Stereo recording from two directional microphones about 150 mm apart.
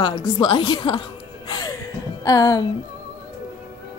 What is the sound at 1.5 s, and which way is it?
Gasp, 25° left (ahead or behind).